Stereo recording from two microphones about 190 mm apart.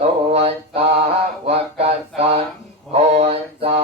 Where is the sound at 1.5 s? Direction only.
30° right (ahead or behind).